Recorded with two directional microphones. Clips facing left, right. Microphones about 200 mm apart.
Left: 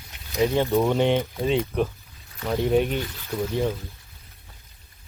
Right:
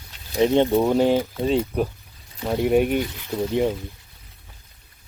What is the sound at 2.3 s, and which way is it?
Speech, 15° right (ahead or behind).